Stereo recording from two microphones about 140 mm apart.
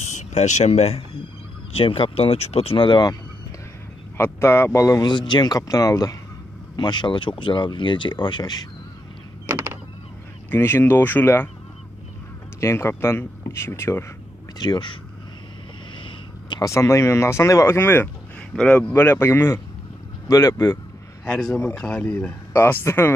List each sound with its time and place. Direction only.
0.1 s speech: 55° left (ahead or behind); by 3.2 s 35° left (ahead or behind)
4.2 s speech: 15° left (ahead or behind)
9.5 s a sound: 15° right (ahead or behind)
10.5 s speech: 15° left (ahead or behind)
12.5 s speech: 20° left (ahead or behind)
14.6 s speech: 35° left (ahead or behind)
16.0 s a sound: 35° left (ahead or behind)
16.6 s speech: 20° left (ahead or behind)
21.3 s speech: 5° left (ahead or behind)